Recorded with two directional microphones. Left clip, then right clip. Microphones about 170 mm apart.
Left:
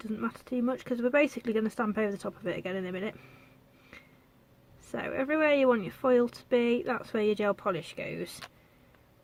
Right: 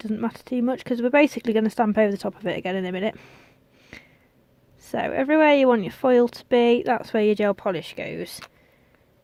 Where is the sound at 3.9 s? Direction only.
45° right (ahead or behind).